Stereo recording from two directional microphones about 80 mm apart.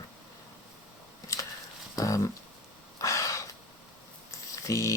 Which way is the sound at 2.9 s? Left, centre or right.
Left.